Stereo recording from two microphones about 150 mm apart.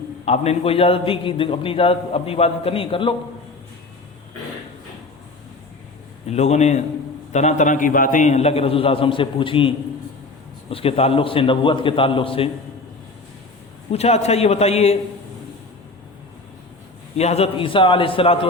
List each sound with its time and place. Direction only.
0.3 s a man's voice: 40° left (ahead or behind)
6.3 s a man's voice: 45° left (ahead or behind)
13.9 s a man's voice: 45° left (ahead or behind)
17.2 s a man's voice: 45° left (ahead or behind)